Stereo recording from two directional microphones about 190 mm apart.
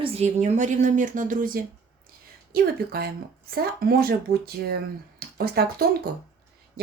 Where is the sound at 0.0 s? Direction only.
35° right (ahead or behind); by 5.7 s 55° right (ahead or behind).